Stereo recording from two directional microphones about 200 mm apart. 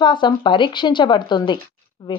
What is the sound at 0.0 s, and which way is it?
Speech, 25° left (ahead or behind).